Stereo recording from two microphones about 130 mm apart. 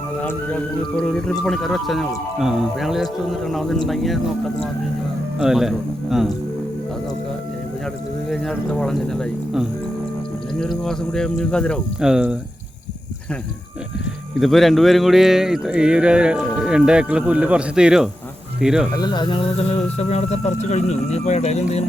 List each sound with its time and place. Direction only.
0.2 s speech: 10° left (ahead or behind)
5.4 s speech: 5° right (ahead or behind)
8.3 s speech: 5° left (ahead or behind)
10.6 s speech: 5° left (ahead or behind)
11.9 s speech: 5° right (ahead or behind)
14.3 s speech: centre (ahead or behind)
18.9 s speech: 35° left (ahead or behind); by 21.8 s 60° left (ahead or behind)